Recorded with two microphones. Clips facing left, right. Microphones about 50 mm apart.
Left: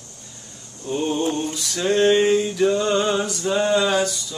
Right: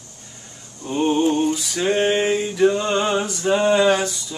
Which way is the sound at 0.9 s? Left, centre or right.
Right.